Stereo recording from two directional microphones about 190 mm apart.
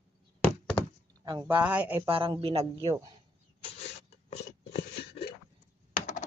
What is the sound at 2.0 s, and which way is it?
Speech, 30° right (ahead or behind).